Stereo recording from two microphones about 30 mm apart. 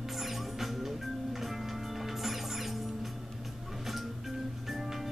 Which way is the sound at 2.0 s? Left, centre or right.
Centre.